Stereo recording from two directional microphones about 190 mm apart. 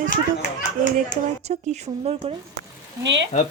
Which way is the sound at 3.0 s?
70° right (ahead or behind).